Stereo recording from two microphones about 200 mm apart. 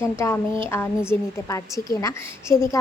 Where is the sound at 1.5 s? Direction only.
15° left (ahead or behind).